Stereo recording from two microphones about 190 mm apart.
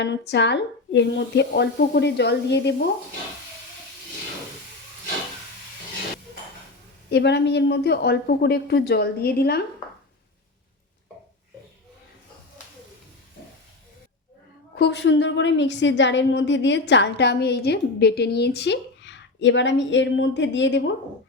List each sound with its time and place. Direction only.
0.0 s speech: 65° left (ahead or behind)
7.1 s speech: 65° left (ahead or behind)
14.8 s a woman's voice: 60° left (ahead or behind)